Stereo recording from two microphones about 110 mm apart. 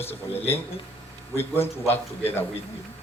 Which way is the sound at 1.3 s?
20° left (ahead or behind).